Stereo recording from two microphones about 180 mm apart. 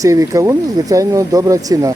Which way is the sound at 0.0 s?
20° right (ahead or behind).